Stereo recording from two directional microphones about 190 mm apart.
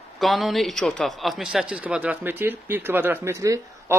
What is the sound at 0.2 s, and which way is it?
A man's voice, centre (ahead or behind).